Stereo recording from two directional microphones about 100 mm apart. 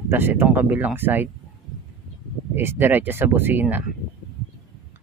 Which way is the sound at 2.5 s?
20° right (ahead or behind).